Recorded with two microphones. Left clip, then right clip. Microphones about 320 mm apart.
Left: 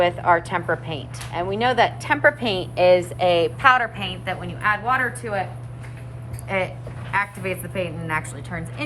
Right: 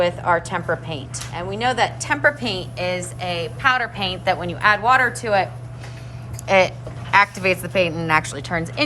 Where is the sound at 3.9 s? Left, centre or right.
Centre.